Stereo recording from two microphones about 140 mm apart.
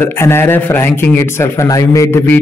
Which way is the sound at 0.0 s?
15° left (ahead or behind).